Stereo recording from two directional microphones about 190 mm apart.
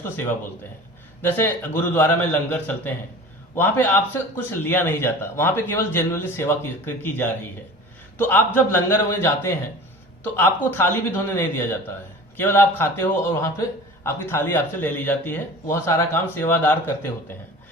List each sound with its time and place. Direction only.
1.2 s a man's voice: 10° left (ahead or behind)